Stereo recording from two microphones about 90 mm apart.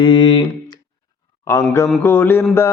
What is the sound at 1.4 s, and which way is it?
Mantra, 35° left (ahead or behind).